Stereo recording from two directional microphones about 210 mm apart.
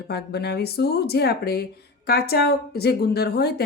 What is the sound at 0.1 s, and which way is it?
A woman's voice, 50° left (ahead or behind).